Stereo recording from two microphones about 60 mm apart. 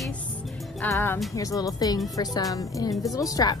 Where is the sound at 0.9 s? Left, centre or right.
Left.